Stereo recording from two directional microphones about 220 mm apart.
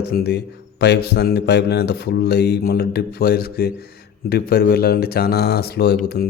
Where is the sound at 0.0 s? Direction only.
45° left (ahead or behind).